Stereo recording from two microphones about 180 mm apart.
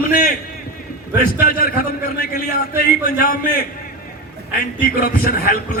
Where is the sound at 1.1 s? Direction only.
55° left (ahead or behind).